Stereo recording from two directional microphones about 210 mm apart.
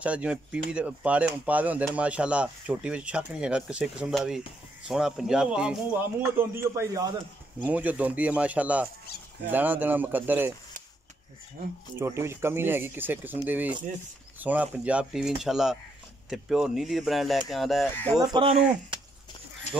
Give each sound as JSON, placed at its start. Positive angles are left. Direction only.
{"t": 0.0, "sound": "speech", "side_deg": -5}
{"t": 12.0, "sound": "speech", "side_deg": -10}
{"t": 18.3, "sound": "speech", "side_deg": -25}